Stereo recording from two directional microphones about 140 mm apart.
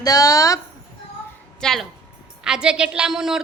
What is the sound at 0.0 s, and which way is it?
Speech, 25° left (ahead or behind).